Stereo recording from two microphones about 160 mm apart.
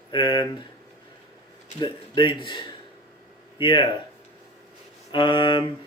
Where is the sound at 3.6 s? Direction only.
30° left (ahead or behind).